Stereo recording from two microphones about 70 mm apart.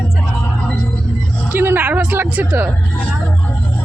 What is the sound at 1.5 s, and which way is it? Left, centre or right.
Music, right.